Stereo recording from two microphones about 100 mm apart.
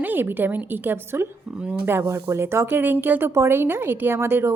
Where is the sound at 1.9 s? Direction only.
25° right (ahead or behind).